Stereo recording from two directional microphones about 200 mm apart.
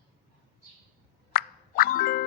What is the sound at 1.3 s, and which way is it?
Music, 45° left (ahead or behind).